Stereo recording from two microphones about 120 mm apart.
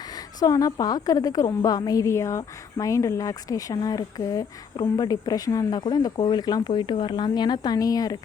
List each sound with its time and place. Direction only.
0.3 s a woman's voice: 30° left (ahead or behind)